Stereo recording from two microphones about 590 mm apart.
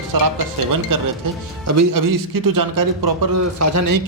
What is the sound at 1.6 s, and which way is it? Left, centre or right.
A man's voice, right.